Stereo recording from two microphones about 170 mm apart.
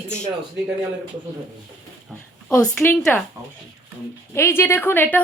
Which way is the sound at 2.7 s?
10° left (ahead or behind).